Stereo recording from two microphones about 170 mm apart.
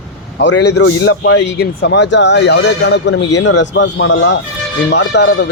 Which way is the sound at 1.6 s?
75° left (ahead or behind).